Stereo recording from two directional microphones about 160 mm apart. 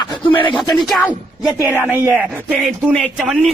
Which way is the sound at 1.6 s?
10° right (ahead or behind).